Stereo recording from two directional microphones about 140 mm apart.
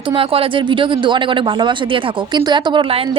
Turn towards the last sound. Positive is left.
turn(degrees=-40)  # may be behind; listen again after turning